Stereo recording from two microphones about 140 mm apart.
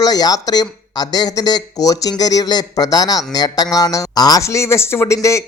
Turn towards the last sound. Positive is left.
turn(degrees=20)  # may be behind; listen again after turning